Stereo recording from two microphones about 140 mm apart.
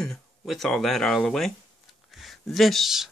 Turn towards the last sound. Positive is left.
turn(degrees=0)  # may be behind; listen again after turning